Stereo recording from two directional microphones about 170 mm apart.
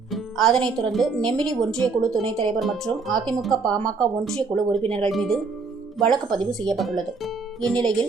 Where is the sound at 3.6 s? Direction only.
25° right (ahead or behind).